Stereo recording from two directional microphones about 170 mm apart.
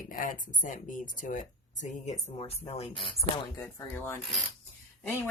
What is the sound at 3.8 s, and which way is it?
Speech, 15° left (ahead or behind).